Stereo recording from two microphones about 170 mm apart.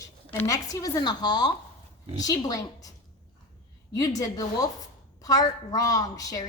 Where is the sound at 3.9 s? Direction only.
20° left (ahead or behind).